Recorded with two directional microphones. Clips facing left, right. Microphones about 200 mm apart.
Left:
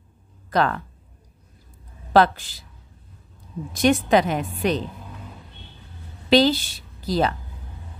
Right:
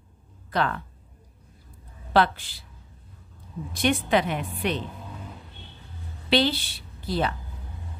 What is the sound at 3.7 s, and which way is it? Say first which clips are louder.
A woman's voice: left 5 dB; 40° left (ahead or behind).